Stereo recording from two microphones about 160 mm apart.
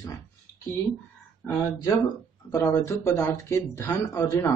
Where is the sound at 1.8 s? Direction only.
20° left (ahead or behind).